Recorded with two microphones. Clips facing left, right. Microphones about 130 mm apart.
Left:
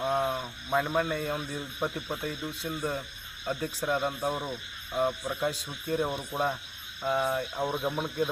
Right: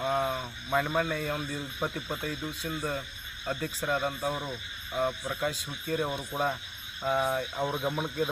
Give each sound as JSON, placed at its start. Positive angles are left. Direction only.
{"t": 0.0, "sound": "speech", "side_deg": 5}